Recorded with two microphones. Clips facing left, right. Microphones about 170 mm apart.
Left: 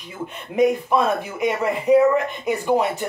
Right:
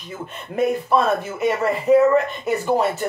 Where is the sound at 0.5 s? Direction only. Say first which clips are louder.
Left 1 dB; 15° left (ahead or behind).